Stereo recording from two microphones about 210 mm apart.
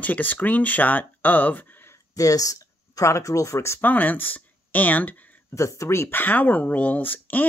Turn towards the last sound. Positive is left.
turn(degrees=10)  # may be behind; listen again after turning